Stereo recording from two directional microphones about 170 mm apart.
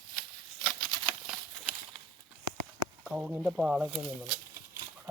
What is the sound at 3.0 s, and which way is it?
Speech, 5° right (ahead or behind).